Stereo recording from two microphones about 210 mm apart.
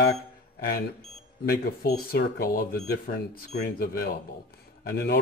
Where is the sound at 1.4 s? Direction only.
45° left (ahead or behind).